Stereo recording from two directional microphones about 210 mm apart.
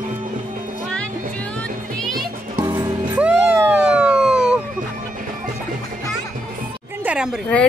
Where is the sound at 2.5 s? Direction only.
20° right (ahead or behind).